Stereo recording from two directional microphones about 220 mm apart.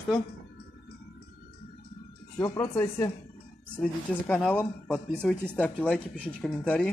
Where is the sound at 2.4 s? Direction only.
15° left (ahead or behind).